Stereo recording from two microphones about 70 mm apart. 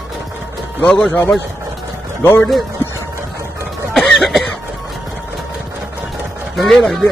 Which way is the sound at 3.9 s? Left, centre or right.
Centre.